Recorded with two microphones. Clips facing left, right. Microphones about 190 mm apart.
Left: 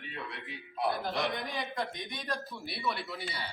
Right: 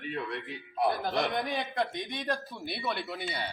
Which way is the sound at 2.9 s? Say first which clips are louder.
Right 1 dB; 55° right (ahead or behind).